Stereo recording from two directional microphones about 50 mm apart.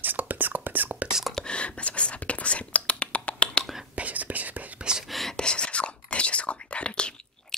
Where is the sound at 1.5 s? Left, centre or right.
Left.